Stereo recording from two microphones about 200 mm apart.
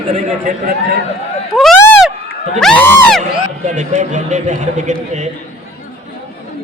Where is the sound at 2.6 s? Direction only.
Centre (ahead or behind).